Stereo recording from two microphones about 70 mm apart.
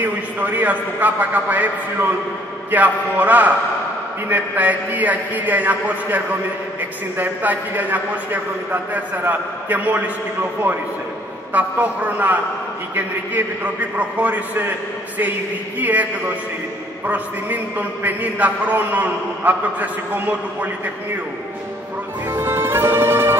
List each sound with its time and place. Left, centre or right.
0.0 s a man's voice: right
11.5 s a man's voice: right
15.8 s a man's voice: right
22.3 s music: right